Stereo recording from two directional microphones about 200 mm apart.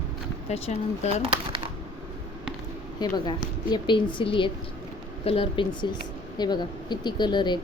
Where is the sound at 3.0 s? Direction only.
20° left (ahead or behind).